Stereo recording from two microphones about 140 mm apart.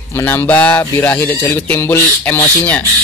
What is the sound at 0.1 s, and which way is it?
Speech, 15° left (ahead or behind).